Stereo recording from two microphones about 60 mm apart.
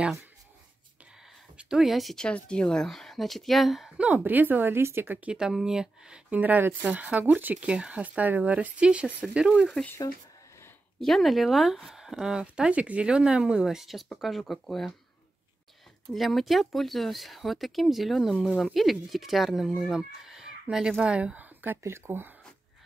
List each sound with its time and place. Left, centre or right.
1.6 s speech: centre
2.1 s speech: centre
4.0 s speech: right
5.3 s speech: centre
6.3 s speech: right
11.0 s speech: centre
16.1 s speech: centre
21.0 s speech: centre
21.8 s speech: right